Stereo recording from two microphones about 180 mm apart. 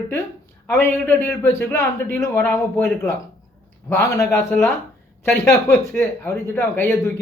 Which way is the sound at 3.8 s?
15° left (ahead or behind).